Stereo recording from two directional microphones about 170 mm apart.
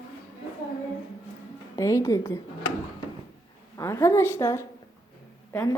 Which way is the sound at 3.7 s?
15° left (ahead or behind).